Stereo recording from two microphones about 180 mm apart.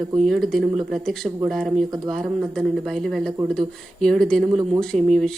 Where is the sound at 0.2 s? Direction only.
Centre (ahead or behind).